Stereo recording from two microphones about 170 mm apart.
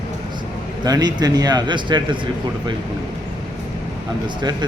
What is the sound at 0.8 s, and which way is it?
Speech, 25° right (ahead or behind).